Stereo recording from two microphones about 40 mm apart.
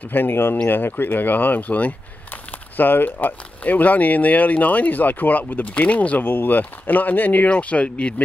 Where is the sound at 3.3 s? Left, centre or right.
Left.